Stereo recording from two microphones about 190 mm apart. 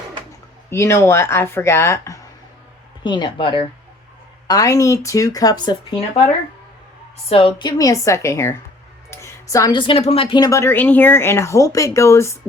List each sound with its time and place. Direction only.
0.7 s speech: 15° left (ahead or behind)
7.3 s speech: 30° left (ahead or behind)